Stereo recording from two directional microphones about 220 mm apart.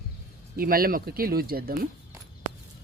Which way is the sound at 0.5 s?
40° right (ahead or behind).